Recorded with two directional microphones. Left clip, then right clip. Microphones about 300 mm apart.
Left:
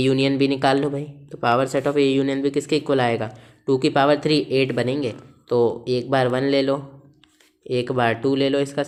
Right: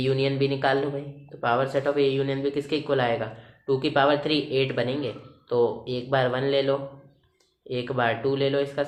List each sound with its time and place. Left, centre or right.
0.0 s speech: left